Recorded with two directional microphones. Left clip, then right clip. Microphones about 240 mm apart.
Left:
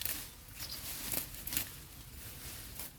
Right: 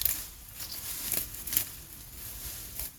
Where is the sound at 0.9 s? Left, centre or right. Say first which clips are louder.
Right 4 dB; centre.